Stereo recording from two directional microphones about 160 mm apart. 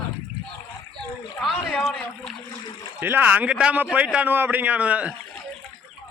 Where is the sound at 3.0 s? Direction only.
10° right (ahead or behind).